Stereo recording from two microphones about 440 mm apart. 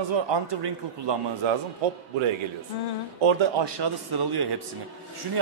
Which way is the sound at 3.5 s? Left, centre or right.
Right.